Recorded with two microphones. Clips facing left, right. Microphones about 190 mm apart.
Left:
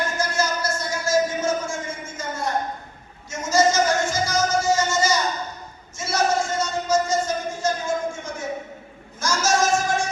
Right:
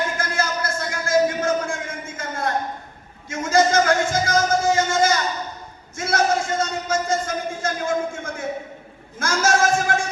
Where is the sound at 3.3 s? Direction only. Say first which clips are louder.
Right 2 dB; 55° right (ahead or behind).